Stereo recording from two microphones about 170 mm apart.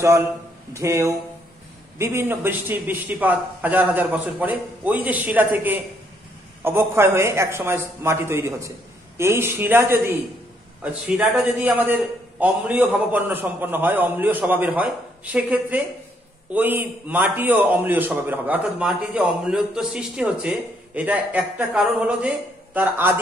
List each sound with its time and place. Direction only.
0.0 s a man's voice: 15° right (ahead or behind)